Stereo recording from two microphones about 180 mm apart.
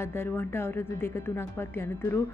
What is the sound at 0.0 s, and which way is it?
A woman's voice, 10° left (ahead or behind).